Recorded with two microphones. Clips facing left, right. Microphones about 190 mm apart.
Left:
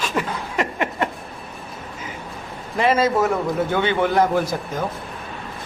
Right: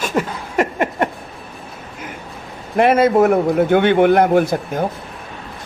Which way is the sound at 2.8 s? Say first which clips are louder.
Right 6 dB; 60° right (ahead or behind).